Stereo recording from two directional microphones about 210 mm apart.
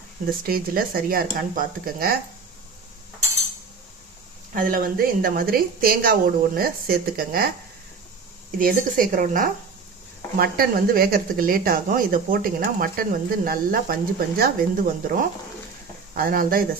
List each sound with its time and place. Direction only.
0.3 s speech: 45° right (ahead or behind)
4.5 s speech: 40° right (ahead or behind)
8.5 s speech: 40° right (ahead or behind)